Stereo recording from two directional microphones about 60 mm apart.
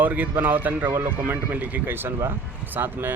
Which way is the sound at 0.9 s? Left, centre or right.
Right.